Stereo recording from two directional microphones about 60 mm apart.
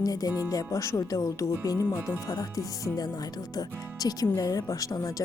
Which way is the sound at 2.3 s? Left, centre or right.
Left.